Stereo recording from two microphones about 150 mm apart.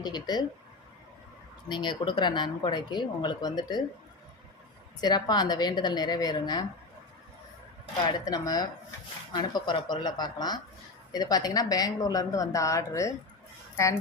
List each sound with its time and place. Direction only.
0.0 s speech: 30° left (ahead or behind)
1.7 s speech: 30° left (ahead or behind)
4.9 s speech: 25° left (ahead or behind)
8.0 s speech: 25° left (ahead or behind)